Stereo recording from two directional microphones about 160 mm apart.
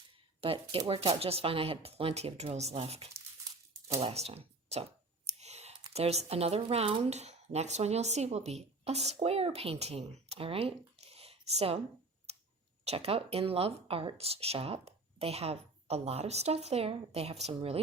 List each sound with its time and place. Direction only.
0.4 s speech: 35° right (ahead or behind)
5.4 s clicking: 45° right (ahead or behind)
5.9 s speech: 40° right (ahead or behind)
12.8 s speech: 40° right (ahead or behind)